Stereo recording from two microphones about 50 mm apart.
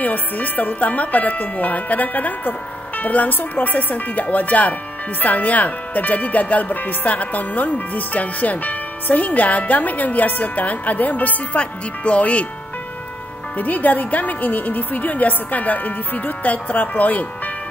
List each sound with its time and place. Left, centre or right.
0.0 s speech: left
13.6 s speech: left